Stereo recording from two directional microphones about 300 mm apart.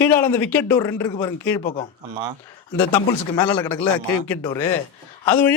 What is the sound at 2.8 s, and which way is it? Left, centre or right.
A man's voice, centre.